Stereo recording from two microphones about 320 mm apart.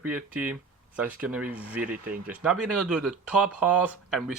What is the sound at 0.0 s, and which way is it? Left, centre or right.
Speech, centre.